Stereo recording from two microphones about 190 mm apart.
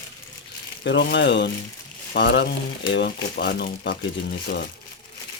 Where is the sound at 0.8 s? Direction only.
60° left (ahead or behind).